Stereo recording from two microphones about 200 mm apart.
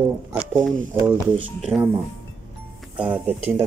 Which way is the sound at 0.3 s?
5° right (ahead or behind).